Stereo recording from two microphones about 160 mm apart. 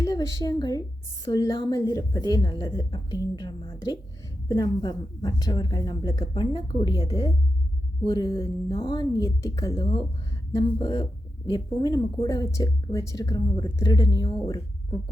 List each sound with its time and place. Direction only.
0.0 s speech: 20° left (ahead or behind)